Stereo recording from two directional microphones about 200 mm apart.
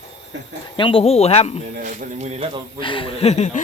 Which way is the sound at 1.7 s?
40° right (ahead or behind).